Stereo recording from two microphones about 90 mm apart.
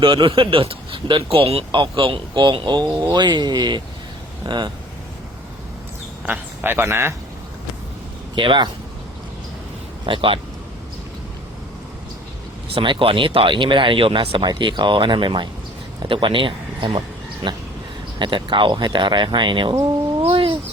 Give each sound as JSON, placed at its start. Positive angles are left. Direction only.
{"t": 0.0, "sound": "speech", "side_deg": -65}
{"t": 6.2, "sound": "a man's voice", "side_deg": -20}
{"t": 8.4, "sound": "speech", "side_deg": -60}
{"t": 10.1, "sound": "speech", "side_deg": -75}
{"t": 12.7, "sound": "speech", "side_deg": -70}
{"t": 14.4, "sound": "speech", "side_deg": -60}
{"t": 17.4, "sound": "speech", "side_deg": -90}
{"t": 18.2, "sound": "speech", "side_deg": -65}
{"t": 20.2, "sound": "bird", "side_deg": -75}